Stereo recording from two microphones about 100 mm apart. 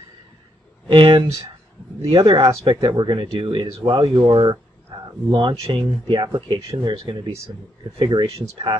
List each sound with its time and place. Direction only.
0.8 s speech: 65° right (ahead or behind); by 3.3 s 50° right (ahead or behind)
3.3 s speech: 60° right (ahead or behind)
4.9 s a sound: 45° right (ahead or behind)
5.3 s speech: 55° right (ahead or behind)